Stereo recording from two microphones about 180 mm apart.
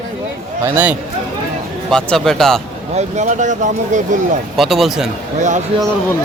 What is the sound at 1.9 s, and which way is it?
Speech, 5° left (ahead or behind).